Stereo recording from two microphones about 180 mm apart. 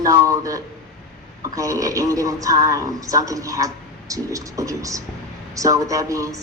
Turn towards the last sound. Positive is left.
turn(degrees=-20)  # may be behind; listen again after turning